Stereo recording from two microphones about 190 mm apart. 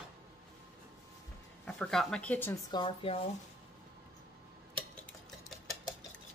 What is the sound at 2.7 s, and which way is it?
Speech, 30° left (ahead or behind).